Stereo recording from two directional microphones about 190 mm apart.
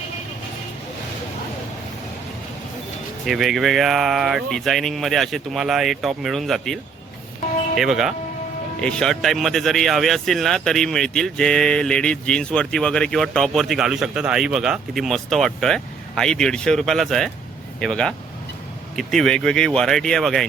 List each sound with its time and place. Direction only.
3.2 s speech: centre (ahead or behind)
7.8 s speech: centre (ahead or behind)